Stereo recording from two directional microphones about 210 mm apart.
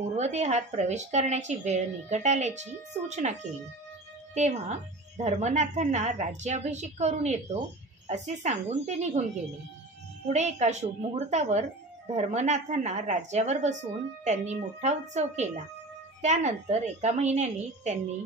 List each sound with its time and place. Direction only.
0.1 s a woman's voice: 35° right (ahead or behind)
10.2 s a woman's voice: 35° right (ahead or behind)